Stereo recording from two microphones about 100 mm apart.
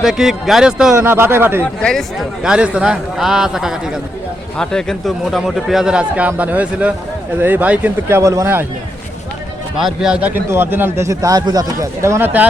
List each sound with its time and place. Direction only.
0.0 s a man's voice: 5° right (ahead or behind)
0.9 s speech: 25° right (ahead or behind)
1.8 s a man's voice: 5° left (ahead or behind)
4.5 s a man's voice: 5° left (ahead or behind); by 8.2 s 15° right (ahead or behind)
8.2 s speech: 35° right (ahead or behind)
9.7 s a man's voice: 5° right (ahead or behind)
10.5 s speech: 20° right (ahead or behind)